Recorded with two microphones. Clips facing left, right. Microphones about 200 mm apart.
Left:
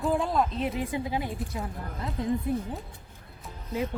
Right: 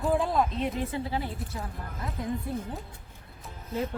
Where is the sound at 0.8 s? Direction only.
15° left (ahead or behind).